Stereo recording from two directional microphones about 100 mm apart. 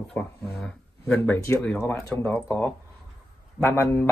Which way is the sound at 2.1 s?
25° left (ahead or behind).